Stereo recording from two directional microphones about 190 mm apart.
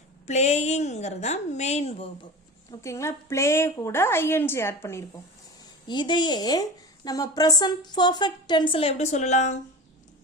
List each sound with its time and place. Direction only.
0.3 s a woman's voice: 35° left (ahead or behind)
2.6 s a woman's voice: 15° left (ahead or behind); by 9.6 s 40° left (ahead or behind)